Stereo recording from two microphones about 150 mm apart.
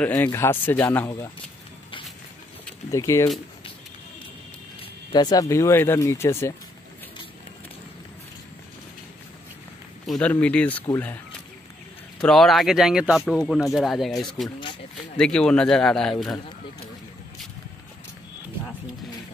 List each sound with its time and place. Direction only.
0.0 s speech: 10° left (ahead or behind)
2.9 s speech: 20° left (ahead or behind)
5.1 s speech: 25° left (ahead or behind)
10.0 s speech: centre (ahead or behind)
12.2 s speech: 5° left (ahead or behind)